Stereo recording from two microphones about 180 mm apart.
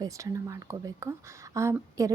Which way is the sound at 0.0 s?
15° right (ahead or behind).